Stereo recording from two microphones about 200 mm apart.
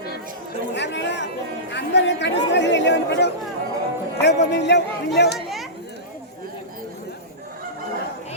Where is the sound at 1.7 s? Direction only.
60° left (ahead or behind).